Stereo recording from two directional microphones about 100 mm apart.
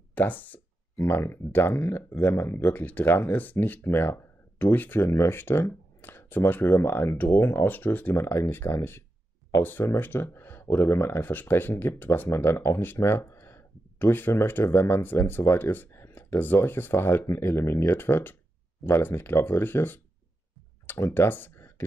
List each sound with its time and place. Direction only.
0.1 s speech: 15° left (ahead or behind)